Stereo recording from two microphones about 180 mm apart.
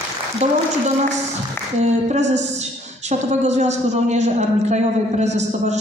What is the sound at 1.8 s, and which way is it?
A woman's voice, 40° right (ahead or behind).